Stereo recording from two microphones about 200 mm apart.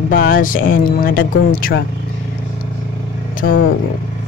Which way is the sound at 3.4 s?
60° left (ahead or behind).